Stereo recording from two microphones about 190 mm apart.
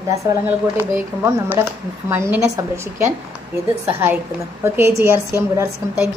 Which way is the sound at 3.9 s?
10° right (ahead or behind).